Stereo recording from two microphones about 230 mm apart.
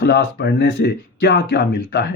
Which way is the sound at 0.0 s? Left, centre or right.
Left.